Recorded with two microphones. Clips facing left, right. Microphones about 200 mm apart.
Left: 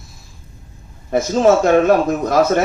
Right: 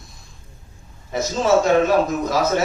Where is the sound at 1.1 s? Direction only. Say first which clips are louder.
Left 5 dB; 55° left (ahead or behind).